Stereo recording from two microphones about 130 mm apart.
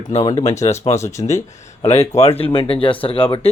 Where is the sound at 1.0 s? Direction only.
20° left (ahead or behind).